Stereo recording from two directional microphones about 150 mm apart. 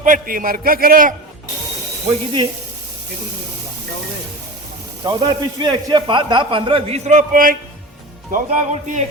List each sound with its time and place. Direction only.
0.0 s a man's voice: 65° right (ahead or behind)
2.0 s a man's voice: 30° right (ahead or behind)
5.0 s a man's voice: 25° right (ahead or behind); by 9.0 s 55° right (ahead or behind)